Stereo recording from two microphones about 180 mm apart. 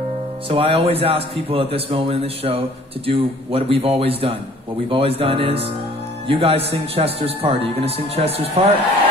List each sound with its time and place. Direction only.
0.5 s a man's voice: 35° right (ahead or behind)